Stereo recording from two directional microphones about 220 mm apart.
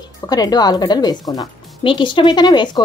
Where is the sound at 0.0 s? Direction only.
15° left (ahead or behind).